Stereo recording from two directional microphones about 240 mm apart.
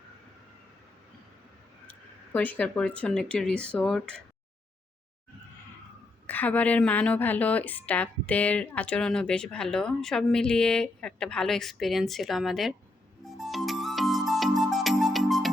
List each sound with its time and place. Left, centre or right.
1.9 s speech: centre
6.2 s a woman's voice: centre
13.2 s music: centre